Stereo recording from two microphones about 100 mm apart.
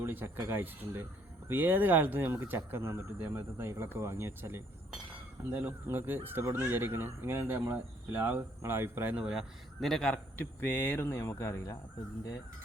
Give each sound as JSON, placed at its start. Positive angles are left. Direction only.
{"t": 0.0, "sound": "speech", "side_deg": -20}
{"t": 10.3, "sound": "speech", "side_deg": 20}